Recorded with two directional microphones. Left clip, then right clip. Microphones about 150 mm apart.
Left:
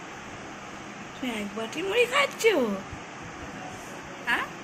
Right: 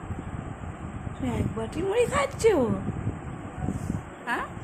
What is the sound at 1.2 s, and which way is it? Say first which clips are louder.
Speech: right 1 dB; 40° right (ahead or behind).